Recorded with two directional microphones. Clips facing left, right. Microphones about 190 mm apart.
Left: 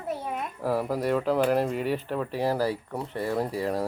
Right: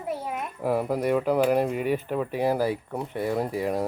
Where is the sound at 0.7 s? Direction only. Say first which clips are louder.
Right 2 dB; 15° right (ahead or behind).